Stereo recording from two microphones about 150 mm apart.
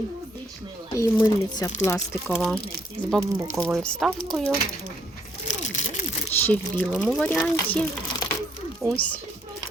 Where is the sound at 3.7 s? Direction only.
5° left (ahead or behind).